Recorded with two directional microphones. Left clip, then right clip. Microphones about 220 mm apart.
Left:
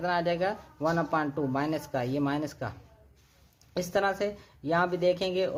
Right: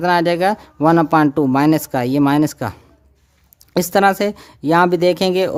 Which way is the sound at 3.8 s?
45° right (ahead or behind).